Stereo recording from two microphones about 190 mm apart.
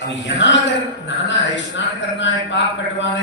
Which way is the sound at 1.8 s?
75° left (ahead or behind).